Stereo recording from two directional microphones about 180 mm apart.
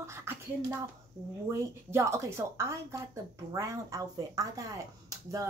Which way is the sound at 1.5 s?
15° right (ahead or behind).